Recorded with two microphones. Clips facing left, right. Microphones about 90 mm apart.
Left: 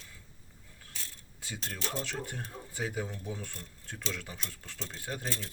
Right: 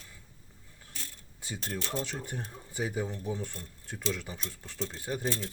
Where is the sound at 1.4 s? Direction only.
20° right (ahead or behind).